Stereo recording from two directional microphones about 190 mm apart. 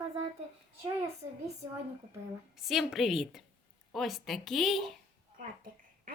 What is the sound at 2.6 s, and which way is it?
A woman's voice, centre (ahead or behind).